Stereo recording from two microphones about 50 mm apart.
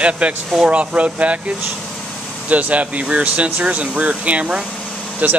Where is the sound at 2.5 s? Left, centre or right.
Right.